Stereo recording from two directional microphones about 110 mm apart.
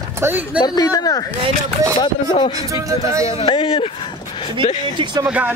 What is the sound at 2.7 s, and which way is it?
Speech, 30° right (ahead or behind).